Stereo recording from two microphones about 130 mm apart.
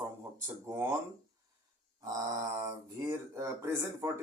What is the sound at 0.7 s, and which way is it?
Speech, 20° right (ahead or behind).